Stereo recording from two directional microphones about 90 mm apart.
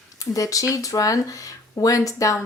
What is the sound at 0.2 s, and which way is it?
A woman's voice, 40° left (ahead or behind).